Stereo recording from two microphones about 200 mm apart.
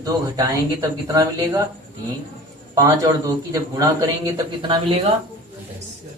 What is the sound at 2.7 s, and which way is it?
A man's voice, 15° right (ahead or behind).